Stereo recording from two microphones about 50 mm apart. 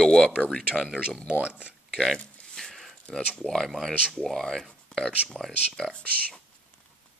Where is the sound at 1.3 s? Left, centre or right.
Right.